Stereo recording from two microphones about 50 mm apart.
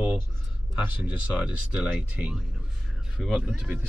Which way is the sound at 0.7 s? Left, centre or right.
Right.